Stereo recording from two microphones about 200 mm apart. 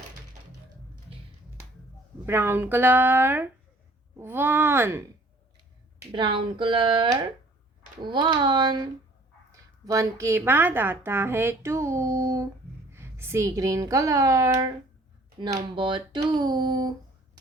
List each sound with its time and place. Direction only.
2.2 s a woman's voice: 10° right (ahead or behind)
6.1 s a woman's voice: 25° right (ahead or behind)